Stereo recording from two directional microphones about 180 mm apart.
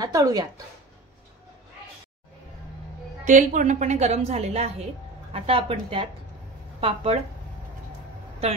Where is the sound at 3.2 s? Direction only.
45° right (ahead or behind).